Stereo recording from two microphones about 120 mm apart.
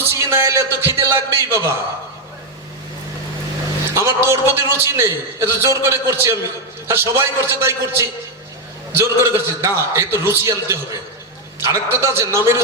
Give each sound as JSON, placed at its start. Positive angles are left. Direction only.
{"t": 0.1, "sound": "a man's voice", "side_deg": -20}
{"t": 3.9, "sound": "a man's voice", "side_deg": -25}